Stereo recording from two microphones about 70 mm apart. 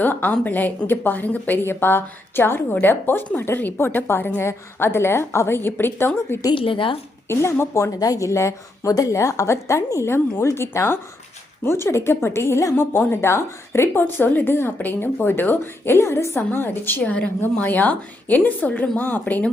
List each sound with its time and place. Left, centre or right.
0.0 s a woman's voice: left
7.6 s a woman's voice: left
7.9 s a woman's voice: left
12.7 s a woman's voice: left
14.0 s a woman's voice: left
16.5 s a woman's voice: left
17.0 s a woman's voice: centre